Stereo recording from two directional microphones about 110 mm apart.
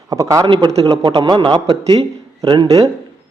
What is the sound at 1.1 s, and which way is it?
Speech, 45° right (ahead or behind).